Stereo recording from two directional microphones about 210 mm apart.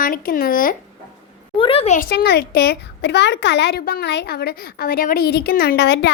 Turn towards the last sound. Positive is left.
turn(degrees=50)  # may be behind; listen again after turning